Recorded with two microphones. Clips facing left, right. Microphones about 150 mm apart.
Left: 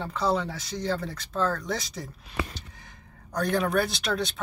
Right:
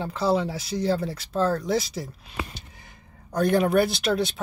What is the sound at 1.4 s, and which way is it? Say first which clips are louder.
Speech: right 4 dB; 30° right (ahead or behind).